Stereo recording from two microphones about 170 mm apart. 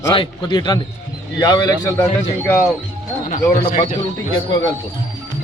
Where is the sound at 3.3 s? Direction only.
50° left (ahead or behind).